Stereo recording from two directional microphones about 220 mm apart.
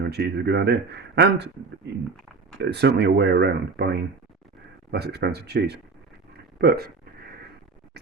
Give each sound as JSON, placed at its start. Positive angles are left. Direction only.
{"t": 0.0, "sound": "speech", "side_deg": -50}
{"t": 2.6, "sound": "speech", "side_deg": -50}
{"t": 6.6, "sound": "a sound", "side_deg": -45}